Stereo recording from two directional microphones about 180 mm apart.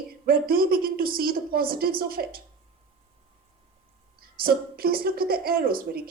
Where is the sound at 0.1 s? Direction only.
55° right (ahead or behind).